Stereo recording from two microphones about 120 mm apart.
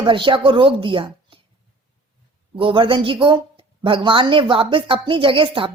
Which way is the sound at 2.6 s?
45° right (ahead or behind).